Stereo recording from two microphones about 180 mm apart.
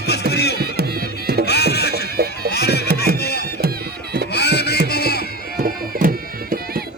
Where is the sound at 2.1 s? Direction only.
60° right (ahead or behind).